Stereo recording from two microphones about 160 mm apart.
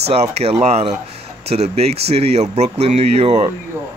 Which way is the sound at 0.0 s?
40° right (ahead or behind).